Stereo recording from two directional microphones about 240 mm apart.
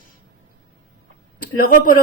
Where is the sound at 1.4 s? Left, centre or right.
Left.